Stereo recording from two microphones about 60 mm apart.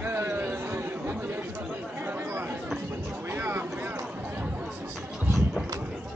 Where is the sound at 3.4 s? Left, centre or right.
Right.